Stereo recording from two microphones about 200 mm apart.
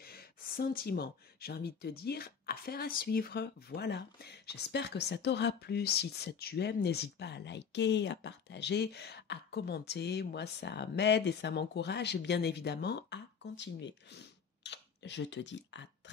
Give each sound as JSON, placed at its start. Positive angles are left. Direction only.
{"t": 0.0, "sound": "speech", "side_deg": 50}